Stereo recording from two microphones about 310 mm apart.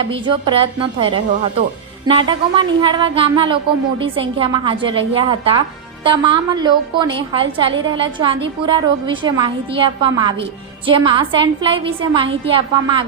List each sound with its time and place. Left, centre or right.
0.0 s a woman's voice: centre